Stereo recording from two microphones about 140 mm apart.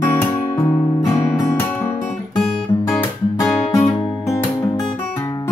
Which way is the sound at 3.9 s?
35° left (ahead or behind).